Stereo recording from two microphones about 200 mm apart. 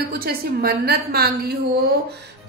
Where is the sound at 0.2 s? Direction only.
50° right (ahead or behind).